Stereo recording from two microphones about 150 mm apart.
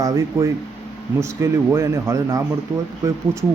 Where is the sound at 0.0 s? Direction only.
20° right (ahead or behind).